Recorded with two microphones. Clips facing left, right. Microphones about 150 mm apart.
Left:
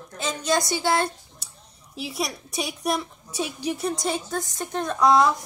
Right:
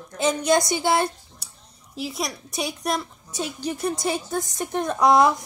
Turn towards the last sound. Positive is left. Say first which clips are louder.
# right 1 dB
turn(degrees=-15)  # may be behind; listen again after turning